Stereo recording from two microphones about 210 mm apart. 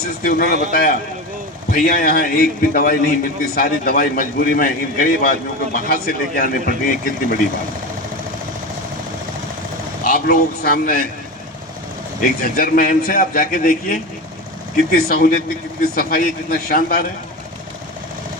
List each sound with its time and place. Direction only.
0.3 s a man's voice: 45° left (ahead or behind)
10.1 s a man's voice: 45° left (ahead or behind)
12.4 s a man's voice: 40° left (ahead or behind)